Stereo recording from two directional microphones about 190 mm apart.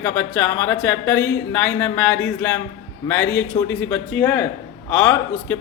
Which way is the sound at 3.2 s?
65° left (ahead or behind).